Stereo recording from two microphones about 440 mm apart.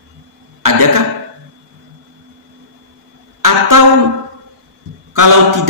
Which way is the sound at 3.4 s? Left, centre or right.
Right.